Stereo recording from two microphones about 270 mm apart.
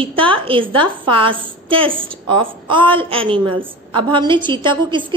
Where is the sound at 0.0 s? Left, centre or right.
Centre.